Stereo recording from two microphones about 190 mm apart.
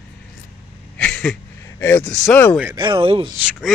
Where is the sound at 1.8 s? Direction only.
10° left (ahead or behind).